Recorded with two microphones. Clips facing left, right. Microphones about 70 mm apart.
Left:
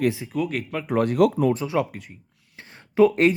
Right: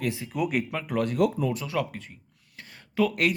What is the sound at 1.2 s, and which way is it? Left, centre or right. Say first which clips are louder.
Speech: left 6 dB; left.